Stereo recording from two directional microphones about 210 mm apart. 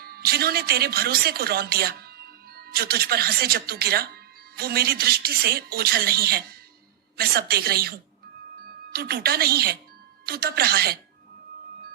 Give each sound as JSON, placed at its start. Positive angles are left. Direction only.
{"t": 0.0, "sound": "a woman's voice", "side_deg": -45}